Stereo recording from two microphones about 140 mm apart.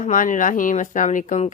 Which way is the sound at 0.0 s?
65° left (ahead or behind).